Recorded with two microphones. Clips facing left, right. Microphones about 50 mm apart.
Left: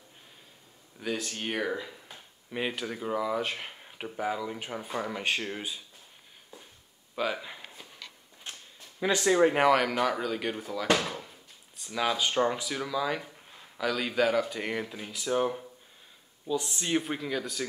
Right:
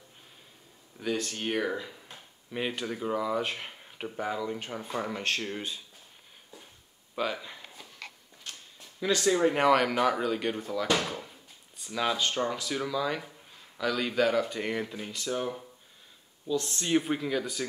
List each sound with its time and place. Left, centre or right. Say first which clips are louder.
0.9 s speech: right 2 dB; centre
7.2 s speech: left 1 dB; centre
8.5 s a sound: left 1 dB; left
9.0 s speech: left 2 dB; centre
9.6 s speech: even; centre
11.0 s drawer open or close: right 1 dB; centre
12.3 s speech: left 3 dB; centre
12.6 s speech: even; centre